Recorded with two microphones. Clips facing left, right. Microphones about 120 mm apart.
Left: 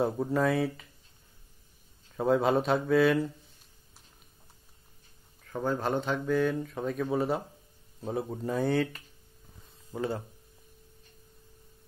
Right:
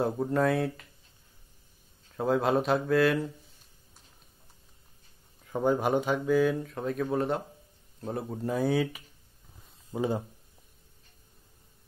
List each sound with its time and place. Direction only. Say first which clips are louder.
0.0 s speech: right 1 dB; centre (ahead or behind)
2.1 s speech: left 1 dB; centre (ahead or behind)
5.5 s speech: right 4 dB; 15° right (ahead or behind)
9.9 s speech: right 3 dB; 15° right (ahead or behind)